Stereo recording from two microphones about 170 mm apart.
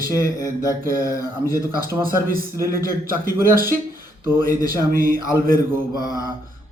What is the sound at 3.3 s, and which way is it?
Speech, 55° right (ahead or behind).